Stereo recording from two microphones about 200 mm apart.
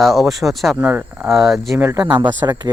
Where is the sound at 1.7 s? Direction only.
15° right (ahead or behind).